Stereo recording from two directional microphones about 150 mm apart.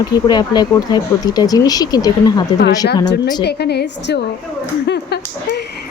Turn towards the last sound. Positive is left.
turn(degrees=90)